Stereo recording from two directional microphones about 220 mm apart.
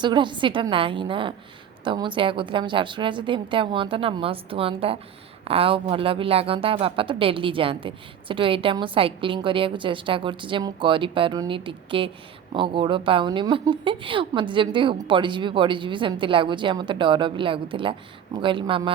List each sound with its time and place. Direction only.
0.0 s speech: 20° right (ahead or behind)